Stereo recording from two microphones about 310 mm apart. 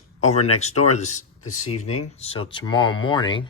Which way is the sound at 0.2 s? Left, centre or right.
Left.